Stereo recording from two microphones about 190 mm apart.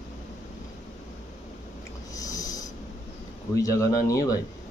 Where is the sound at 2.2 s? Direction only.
20° left (ahead or behind).